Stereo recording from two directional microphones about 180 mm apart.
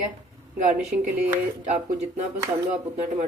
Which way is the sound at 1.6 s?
40° right (ahead or behind).